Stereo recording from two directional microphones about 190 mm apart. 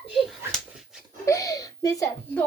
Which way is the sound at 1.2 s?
15° left (ahead or behind).